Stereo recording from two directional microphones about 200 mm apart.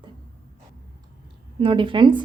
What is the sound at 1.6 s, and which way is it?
Speech, 25° right (ahead or behind).